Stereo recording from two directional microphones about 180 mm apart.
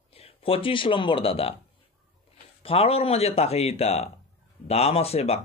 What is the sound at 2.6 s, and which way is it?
Speech, 35° left (ahead or behind).